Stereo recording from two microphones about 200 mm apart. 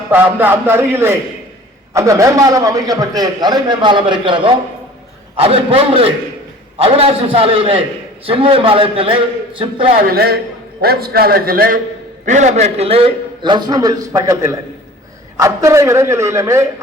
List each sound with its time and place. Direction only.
0.1 s a man's voice: 10° right (ahead or behind); by 9.9 s 25° right (ahead or behind)
10.0 s a man's voice: 50° right (ahead or behind); by 16.6 s 15° right (ahead or behind)